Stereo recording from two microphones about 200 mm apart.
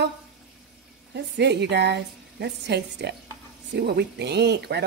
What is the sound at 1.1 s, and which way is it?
A woman's voice, 55° right (ahead or behind).